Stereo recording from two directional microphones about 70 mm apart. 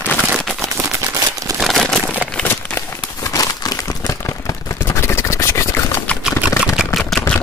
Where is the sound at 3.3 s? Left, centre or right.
Left.